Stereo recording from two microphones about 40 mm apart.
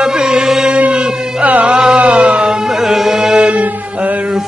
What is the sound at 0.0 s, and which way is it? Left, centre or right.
Music, centre.